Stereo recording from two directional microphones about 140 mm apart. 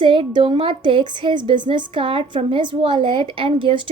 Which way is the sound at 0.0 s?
35° right (ahead or behind).